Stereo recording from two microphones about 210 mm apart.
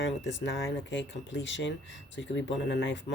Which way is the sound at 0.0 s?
60° left (ahead or behind).